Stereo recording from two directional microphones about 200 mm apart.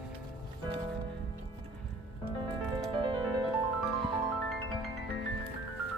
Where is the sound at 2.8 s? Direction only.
25° right (ahead or behind).